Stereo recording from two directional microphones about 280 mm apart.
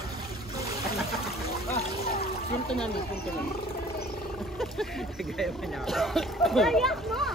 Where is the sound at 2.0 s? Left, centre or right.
Left.